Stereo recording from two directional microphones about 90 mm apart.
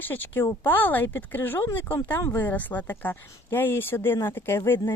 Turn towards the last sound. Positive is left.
turn(degrees=25)  # may be behind; listen again after turning